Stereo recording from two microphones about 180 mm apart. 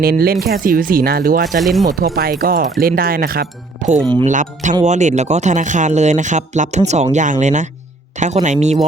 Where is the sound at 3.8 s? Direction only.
45° right (ahead or behind).